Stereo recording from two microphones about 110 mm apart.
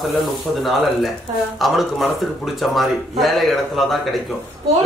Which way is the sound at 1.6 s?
Centre (ahead or behind).